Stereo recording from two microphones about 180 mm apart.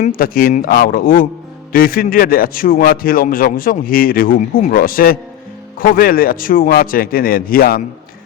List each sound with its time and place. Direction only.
0.0 s a man's voice: 55° left (ahead or behind)